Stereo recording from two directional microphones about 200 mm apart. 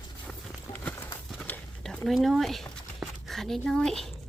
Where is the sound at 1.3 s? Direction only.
5° left (ahead or behind).